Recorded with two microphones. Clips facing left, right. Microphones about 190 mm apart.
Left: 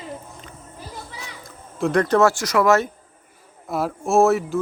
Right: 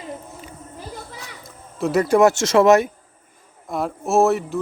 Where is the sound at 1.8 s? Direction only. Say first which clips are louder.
Right 2 dB; 5° right (ahead or behind); by 2.7 s 25° right (ahead or behind).